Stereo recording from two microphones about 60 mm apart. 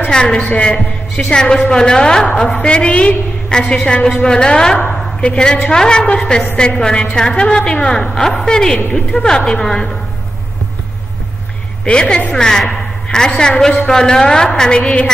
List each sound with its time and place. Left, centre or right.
0.1 s a woman's voice: centre
3.6 s a woman's voice: centre
11.8 s a woman's voice: centre